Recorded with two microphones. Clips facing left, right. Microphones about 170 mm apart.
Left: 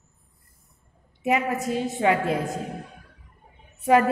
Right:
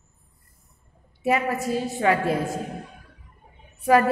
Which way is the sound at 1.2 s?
20° left (ahead or behind).